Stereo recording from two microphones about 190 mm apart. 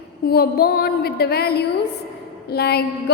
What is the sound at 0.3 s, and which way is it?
A woman's voice, 55° left (ahead or behind).